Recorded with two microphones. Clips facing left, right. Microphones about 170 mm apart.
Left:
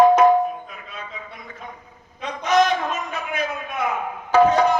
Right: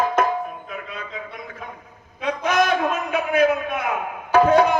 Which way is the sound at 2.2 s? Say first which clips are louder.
Left 1 dB; 55° right (ahead or behind).